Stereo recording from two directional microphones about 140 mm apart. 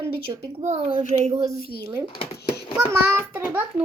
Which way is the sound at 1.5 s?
90° left.